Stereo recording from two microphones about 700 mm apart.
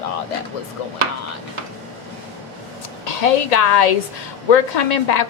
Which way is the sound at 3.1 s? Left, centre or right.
Left.